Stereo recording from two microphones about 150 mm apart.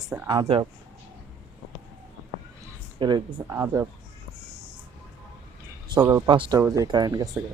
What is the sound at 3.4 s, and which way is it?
Speech, 20° right (ahead or behind).